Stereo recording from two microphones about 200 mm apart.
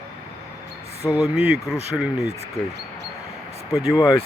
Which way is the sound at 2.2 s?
35° right (ahead or behind).